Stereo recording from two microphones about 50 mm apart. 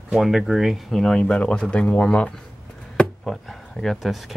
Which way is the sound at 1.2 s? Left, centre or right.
Centre.